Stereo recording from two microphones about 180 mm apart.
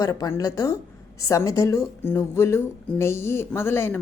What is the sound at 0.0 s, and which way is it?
A woman's voice, 20° left (ahead or behind).